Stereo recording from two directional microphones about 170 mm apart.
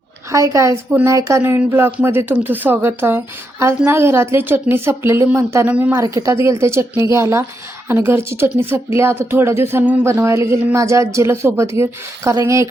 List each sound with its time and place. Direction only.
0.3 s a woman's voice: 20° right (ahead or behind)